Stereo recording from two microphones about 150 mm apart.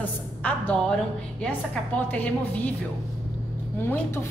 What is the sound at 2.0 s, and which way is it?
Speech, 10° left (ahead or behind).